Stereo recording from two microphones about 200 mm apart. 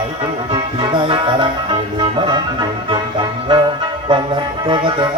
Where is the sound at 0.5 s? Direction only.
25° right (ahead or behind).